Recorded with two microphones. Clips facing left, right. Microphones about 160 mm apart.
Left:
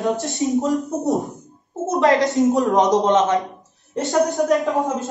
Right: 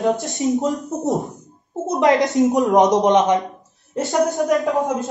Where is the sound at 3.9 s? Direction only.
Centre (ahead or behind).